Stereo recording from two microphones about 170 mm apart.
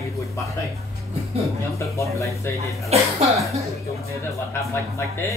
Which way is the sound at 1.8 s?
15° left (ahead or behind).